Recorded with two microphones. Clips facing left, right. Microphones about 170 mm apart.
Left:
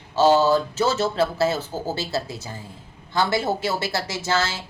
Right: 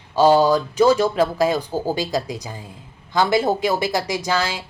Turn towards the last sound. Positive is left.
turn(degrees=-15)  # may be behind; listen again after turning